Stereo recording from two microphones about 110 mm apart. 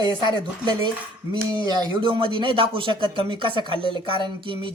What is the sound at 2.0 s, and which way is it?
Speech, 50° right (ahead or behind).